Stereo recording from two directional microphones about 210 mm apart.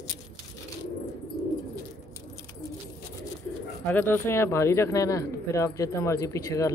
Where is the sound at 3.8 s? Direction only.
10° left (ahead or behind).